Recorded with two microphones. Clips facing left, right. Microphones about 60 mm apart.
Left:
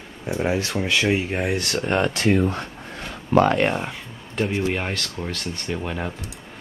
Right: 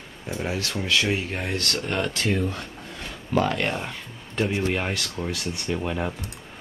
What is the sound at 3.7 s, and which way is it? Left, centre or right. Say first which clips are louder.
Speech: left 4 dB; centre.